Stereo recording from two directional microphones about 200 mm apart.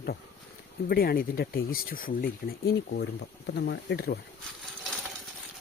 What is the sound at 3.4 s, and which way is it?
Speech, 60° left (ahead or behind).